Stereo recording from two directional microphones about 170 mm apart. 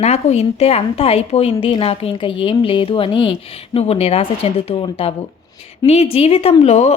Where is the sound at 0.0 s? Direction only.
40° left (ahead or behind).